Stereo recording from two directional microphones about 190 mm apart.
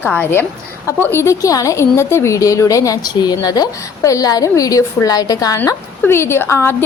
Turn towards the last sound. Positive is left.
turn(degrees=15)  # may be behind; listen again after turning